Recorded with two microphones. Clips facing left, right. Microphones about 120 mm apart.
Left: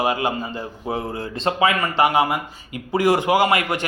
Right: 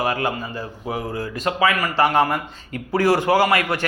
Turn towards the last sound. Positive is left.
turn(degrees=20)  # may be behind; listen again after turning